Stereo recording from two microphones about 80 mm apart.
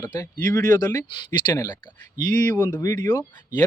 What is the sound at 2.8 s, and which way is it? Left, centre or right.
Speech, left.